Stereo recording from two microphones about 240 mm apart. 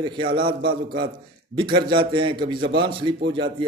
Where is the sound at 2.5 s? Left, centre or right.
Right.